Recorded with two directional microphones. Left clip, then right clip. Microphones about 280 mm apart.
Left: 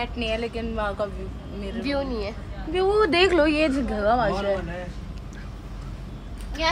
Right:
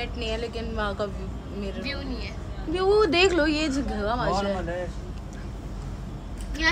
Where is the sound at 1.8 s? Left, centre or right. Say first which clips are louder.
Left 7 dB; centre.